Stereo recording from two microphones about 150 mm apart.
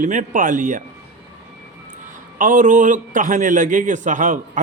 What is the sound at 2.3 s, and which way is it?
A man's voice, 60° right (ahead or behind).